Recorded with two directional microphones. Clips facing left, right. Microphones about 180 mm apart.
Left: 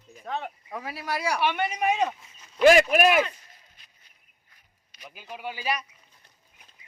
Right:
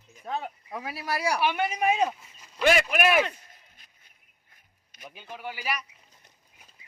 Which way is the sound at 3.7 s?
50° right (ahead or behind).